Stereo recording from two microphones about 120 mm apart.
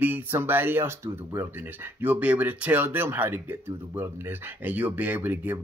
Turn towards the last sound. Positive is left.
turn(degrees=-15)  # may be behind; listen again after turning